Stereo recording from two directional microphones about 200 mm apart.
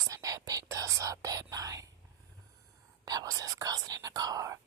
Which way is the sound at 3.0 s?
20° right (ahead or behind).